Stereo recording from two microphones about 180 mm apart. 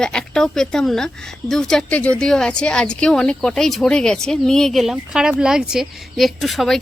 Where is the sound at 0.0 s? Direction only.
5° left (ahead or behind).